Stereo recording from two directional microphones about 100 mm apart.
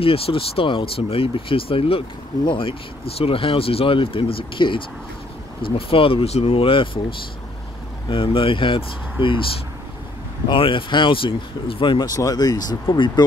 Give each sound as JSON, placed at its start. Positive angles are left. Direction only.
{"t": 0.0, "sound": "speech", "side_deg": 70}
{"t": 10.5, "sound": "speech", "side_deg": 55}
{"t": 12.1, "sound": "speech", "side_deg": 35}